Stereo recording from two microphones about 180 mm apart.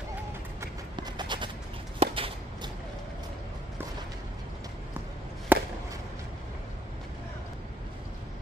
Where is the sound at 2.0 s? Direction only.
30° right (ahead or behind).